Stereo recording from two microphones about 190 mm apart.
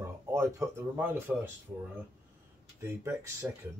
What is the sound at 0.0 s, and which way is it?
Speech, 15° right (ahead or behind).